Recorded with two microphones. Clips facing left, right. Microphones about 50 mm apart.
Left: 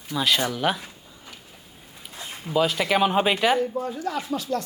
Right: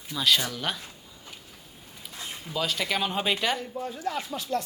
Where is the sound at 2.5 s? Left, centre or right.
Centre.